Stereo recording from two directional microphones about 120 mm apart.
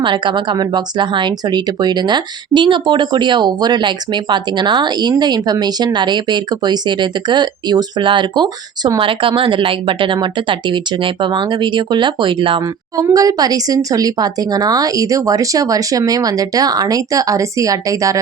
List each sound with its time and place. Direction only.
0.0 s speech: 40° right (ahead or behind)
13.1 s speech: 30° right (ahead or behind)